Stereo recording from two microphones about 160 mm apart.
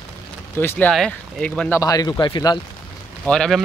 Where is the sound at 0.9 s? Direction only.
5° left (ahead or behind).